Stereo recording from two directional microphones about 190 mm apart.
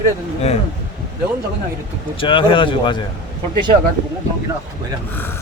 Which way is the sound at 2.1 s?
25° left (ahead or behind).